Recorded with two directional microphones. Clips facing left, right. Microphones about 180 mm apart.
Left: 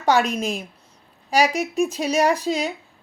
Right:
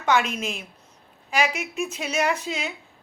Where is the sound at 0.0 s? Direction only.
35° left (ahead or behind).